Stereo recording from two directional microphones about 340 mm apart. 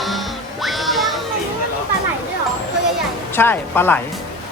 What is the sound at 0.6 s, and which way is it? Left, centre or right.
Music, centre.